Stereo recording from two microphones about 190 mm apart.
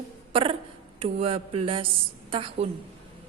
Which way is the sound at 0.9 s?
30° right (ahead or behind).